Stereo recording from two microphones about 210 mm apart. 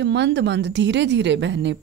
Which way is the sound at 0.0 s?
55° right (ahead or behind).